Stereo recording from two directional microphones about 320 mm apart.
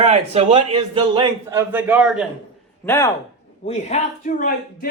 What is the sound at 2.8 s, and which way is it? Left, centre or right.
Speech, centre.